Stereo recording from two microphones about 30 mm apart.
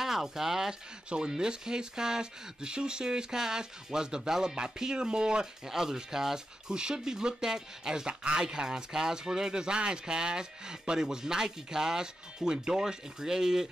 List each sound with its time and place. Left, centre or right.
0.0 s speech: centre
0.7 s speech: right
8.1 s speech: right
8.4 s speech: right